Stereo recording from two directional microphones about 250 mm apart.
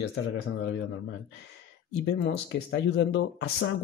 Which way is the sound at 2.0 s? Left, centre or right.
Left.